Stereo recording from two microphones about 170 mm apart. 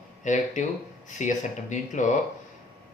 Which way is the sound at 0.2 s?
45° left (ahead or behind).